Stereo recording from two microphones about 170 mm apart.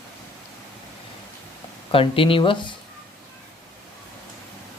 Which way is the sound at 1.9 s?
30° left (ahead or behind).